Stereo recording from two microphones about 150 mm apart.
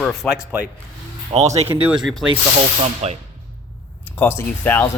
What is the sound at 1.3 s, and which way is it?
Speech, 40° right (ahead or behind).